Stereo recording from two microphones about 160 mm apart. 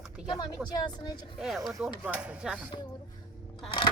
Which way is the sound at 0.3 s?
25° left (ahead or behind).